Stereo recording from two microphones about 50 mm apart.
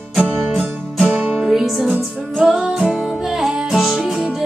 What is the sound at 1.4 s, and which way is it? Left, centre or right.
Music, centre.